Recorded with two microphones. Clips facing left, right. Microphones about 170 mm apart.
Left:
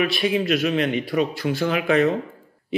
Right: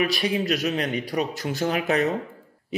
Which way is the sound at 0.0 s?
40° right (ahead or behind).